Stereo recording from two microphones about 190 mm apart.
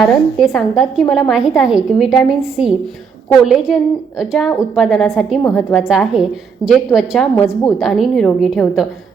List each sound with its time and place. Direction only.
0.0 s a woman's voice: centre (ahead or behind)
5.9 s a woman's voice: 5° right (ahead or behind)